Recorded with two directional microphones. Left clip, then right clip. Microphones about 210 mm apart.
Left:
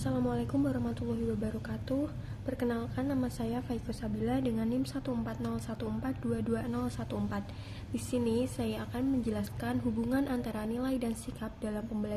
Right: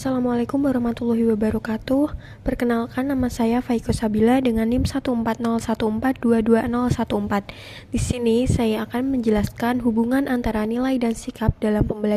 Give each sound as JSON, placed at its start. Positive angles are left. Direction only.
{"t": 0.0, "sound": "a woman's voice", "side_deg": -35}